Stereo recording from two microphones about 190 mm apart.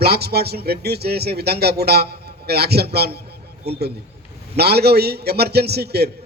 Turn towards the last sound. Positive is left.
turn(degrees=-60)  # may be behind; listen again after turning